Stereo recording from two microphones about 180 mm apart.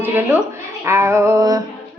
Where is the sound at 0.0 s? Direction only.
10° right (ahead or behind).